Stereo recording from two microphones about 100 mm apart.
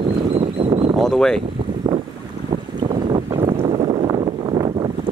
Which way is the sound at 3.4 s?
75° right (ahead or behind).